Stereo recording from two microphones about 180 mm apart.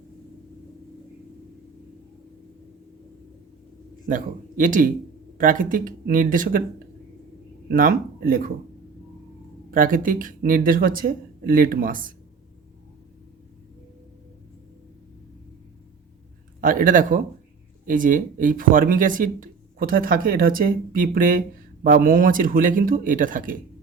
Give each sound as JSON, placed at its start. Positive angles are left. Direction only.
{"t": 4.0, "sound": "speech", "side_deg": -50}
{"t": 7.7, "sound": "speech", "side_deg": -50}
{"t": 9.7, "sound": "speech", "side_deg": -50}
{"t": 16.6, "sound": "speech", "side_deg": -50}